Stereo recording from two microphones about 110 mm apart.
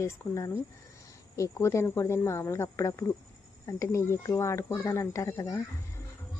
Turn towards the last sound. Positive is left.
turn(degrees=30)  # may be behind; listen again after turning